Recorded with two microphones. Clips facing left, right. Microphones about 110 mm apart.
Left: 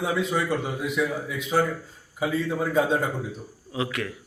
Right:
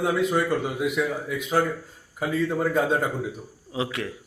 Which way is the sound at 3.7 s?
25° right (ahead or behind).